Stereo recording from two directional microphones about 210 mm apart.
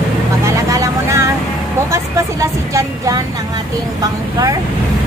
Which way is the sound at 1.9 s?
15° right (ahead or behind).